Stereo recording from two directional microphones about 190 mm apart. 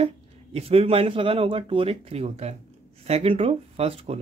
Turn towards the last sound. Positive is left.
turn(degrees=-30)  # may be behind; listen again after turning